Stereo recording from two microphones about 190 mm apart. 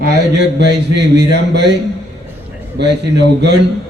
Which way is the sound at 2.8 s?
65° right (ahead or behind).